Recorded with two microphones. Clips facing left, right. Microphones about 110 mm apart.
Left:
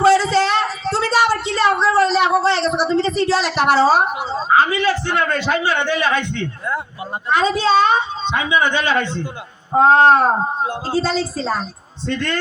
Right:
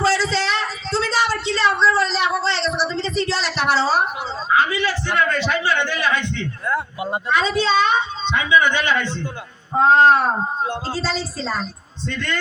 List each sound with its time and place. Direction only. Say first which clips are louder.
0.0 s a sound: left 6 dB; 50° left (ahead or behind)
2.9 s a woman's voice: left 6 dB; 45° left (ahead or behind)
4.2 s a sound: left 5 dB; 20° left (ahead or behind)
4.5 s a man's voice: left 3 dB; 40° left (ahead or behind)
10.6 s speech: left 4 dB; 10° left (ahead or behind)
11.0 s speech: left 4 dB; 50° left (ahead or behind)